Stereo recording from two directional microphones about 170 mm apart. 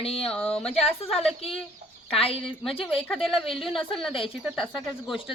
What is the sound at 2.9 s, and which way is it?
Speech, centre (ahead or behind).